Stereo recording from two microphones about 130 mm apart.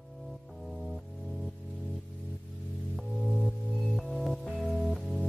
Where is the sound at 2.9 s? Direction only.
Centre (ahead or behind).